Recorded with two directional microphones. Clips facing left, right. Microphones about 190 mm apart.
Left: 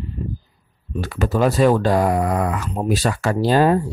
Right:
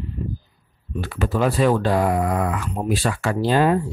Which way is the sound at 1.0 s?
40° left (ahead or behind).